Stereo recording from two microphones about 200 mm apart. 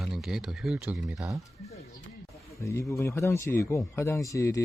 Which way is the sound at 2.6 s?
15° left (ahead or behind).